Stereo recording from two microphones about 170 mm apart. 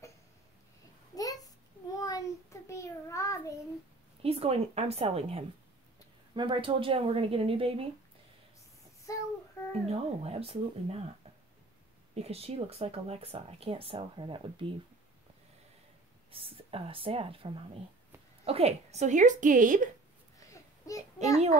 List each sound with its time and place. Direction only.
1.1 s a sound: 20° left (ahead or behind)
2.0 s child singing: 20° left (ahead or behind)
4.2 s speech: 35° right (ahead or behind)
9.1 s child singing: 20° left (ahead or behind)
9.8 s speech: 35° right (ahead or behind)
12.2 s speech: 35° right (ahead or behind)
16.3 s speech: 30° right (ahead or behind); by 19.9 s 50° right (ahead or behind)
20.8 s a child's voice: 20° left (ahead or behind)